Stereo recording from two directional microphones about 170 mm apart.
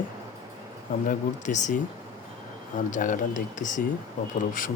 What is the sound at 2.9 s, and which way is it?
Speech, 50° left (ahead or behind).